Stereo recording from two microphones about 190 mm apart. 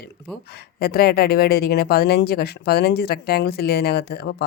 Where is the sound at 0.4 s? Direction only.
55° left (ahead or behind).